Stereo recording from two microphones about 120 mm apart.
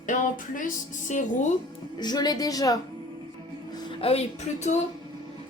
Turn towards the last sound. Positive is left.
turn(degrees=70)  # may be behind; listen again after turning